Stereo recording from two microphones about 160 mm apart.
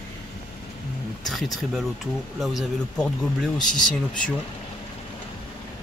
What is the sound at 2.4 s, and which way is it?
Speech, centre (ahead or behind).